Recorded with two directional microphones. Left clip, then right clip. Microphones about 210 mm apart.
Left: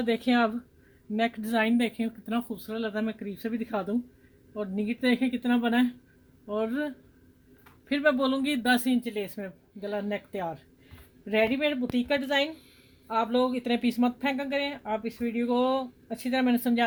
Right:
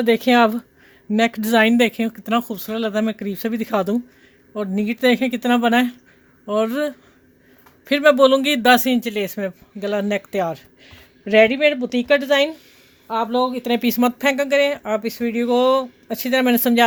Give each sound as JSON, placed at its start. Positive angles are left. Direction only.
{"t": 0.0, "sound": "speech", "side_deg": -50}
{"t": 13.1, "sound": "speech", "side_deg": -40}